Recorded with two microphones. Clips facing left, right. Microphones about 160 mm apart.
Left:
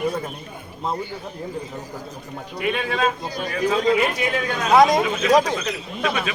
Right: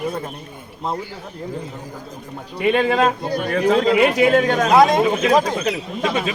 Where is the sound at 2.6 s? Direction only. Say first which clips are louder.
Right 6 dB; 65° right (ahead or behind).